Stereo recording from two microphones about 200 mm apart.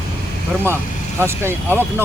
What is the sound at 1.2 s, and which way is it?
Speech, 10° right (ahead or behind).